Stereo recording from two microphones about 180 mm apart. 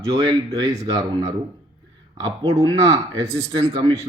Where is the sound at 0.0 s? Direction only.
20° right (ahead or behind).